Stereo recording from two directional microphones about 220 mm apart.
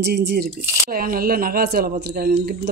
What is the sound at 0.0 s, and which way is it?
A woman's voice, 50° right (ahead or behind).